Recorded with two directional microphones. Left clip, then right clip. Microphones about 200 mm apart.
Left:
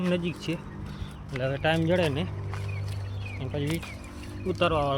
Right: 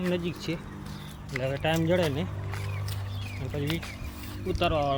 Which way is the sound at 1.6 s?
5° left (ahead or behind).